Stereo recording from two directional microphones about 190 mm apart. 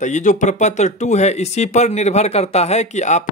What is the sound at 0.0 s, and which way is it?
Speech, 40° left (ahead or behind).